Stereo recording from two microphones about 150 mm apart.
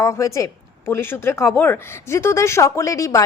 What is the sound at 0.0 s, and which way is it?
Speech, 20° left (ahead or behind).